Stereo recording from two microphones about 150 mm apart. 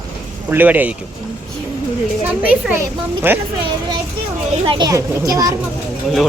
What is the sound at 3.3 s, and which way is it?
Speech, 15° right (ahead or behind).